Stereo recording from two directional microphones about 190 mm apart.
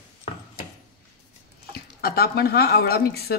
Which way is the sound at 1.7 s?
55° left (ahead or behind).